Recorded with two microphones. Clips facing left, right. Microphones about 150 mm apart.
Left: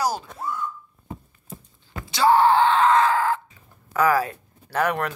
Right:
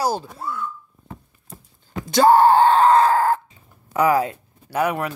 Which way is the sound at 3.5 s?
20° right (ahead or behind).